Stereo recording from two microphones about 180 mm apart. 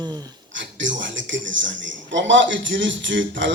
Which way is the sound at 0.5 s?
90° right.